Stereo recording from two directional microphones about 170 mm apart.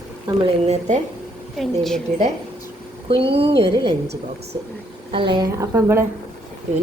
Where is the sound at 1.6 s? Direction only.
Centre (ahead or behind).